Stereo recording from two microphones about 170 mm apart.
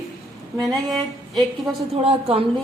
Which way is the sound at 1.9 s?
35° right (ahead or behind).